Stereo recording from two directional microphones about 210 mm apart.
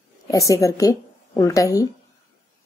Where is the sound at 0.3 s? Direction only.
15° left (ahead or behind).